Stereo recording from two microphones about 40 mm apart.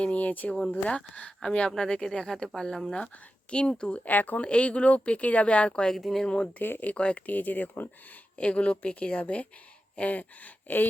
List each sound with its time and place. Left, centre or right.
0.0 s speech: left
1.7 s speech: centre
4.0 s speech: left
4.4 s speech: left
5.9 s speech: centre
6.2 s speech: left
6.6 s speech: left
6.9 s speech: left
7.3 s speech: left
8.4 s speech: left
9.9 s a sound: left